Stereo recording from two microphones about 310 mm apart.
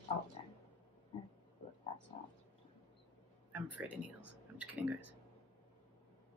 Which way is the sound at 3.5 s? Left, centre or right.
Centre.